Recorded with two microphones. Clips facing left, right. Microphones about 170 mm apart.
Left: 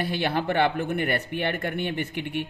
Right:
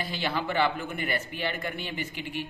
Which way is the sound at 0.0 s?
60° left (ahead or behind).